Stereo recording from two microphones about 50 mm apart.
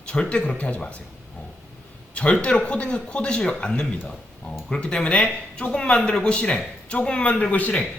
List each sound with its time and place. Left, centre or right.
0.0 s a man's voice: centre
2.1 s a man's voice: left